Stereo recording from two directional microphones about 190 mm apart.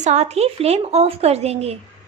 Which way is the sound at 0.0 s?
35° right (ahead or behind).